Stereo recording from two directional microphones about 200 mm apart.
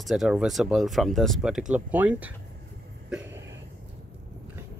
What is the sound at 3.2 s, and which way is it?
Cough, 65° right (ahead or behind).